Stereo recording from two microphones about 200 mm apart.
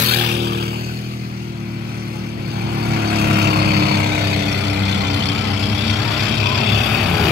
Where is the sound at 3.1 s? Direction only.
50° right (ahead or behind).